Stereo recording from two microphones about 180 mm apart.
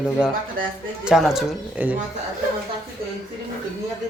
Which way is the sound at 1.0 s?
5° right (ahead or behind).